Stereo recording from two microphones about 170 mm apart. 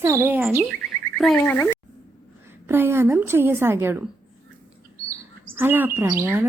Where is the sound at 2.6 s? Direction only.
15° right (ahead or behind).